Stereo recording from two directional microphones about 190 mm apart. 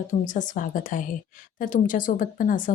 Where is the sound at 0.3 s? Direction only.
40° left (ahead or behind).